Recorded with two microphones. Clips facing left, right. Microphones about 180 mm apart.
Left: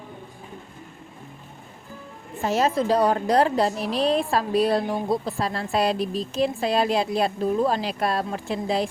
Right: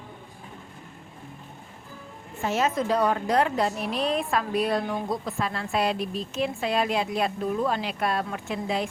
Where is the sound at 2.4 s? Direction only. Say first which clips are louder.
Left 3 dB; 35° left (ahead or behind).